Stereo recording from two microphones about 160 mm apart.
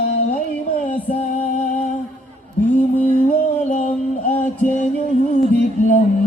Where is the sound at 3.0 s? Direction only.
50° left (ahead or behind).